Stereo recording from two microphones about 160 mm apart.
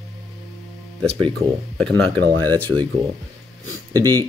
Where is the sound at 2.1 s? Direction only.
10° left (ahead or behind).